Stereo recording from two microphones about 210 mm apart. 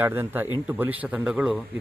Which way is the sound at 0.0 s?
10° right (ahead or behind).